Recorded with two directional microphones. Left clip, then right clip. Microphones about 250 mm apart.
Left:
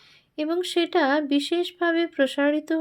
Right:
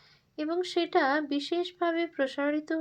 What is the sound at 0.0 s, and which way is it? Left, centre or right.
Speech, left.